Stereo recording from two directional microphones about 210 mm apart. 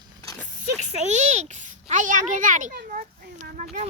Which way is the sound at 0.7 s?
35° right (ahead or behind).